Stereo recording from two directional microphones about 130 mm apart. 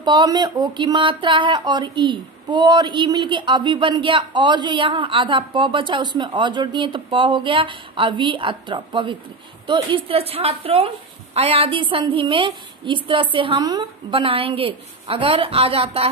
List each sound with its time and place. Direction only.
0.0 s a woman's voice: 35° right (ahead or behind)